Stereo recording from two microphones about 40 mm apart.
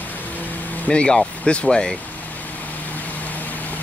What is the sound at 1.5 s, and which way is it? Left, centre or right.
Speech, left.